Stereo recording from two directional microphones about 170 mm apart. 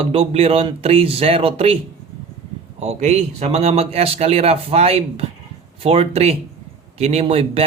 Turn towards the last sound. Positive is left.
turn(degrees=-35)  # may be behind; listen again after turning